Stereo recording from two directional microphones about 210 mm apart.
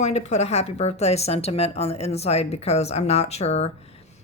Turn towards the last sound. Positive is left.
turn(degrees=30)  # may be behind; listen again after turning